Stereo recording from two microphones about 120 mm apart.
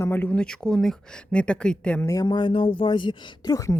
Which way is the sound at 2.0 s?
30° left (ahead or behind).